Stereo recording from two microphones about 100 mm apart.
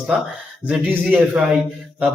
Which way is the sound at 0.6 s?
15° right (ahead or behind).